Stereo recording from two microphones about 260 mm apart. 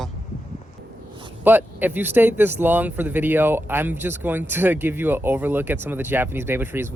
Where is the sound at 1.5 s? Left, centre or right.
Centre.